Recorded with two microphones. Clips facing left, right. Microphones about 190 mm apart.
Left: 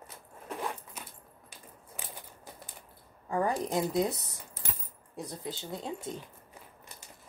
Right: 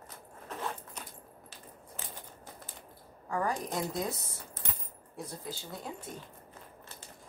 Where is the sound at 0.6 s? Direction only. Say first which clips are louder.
Left 1 dB; 10° left (ahead or behind).